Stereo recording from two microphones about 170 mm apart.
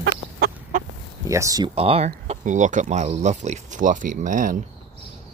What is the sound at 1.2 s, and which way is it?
Speech, 20° right (ahead or behind).